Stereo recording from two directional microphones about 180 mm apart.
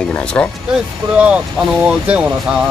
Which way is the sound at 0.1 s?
5° left (ahead or behind).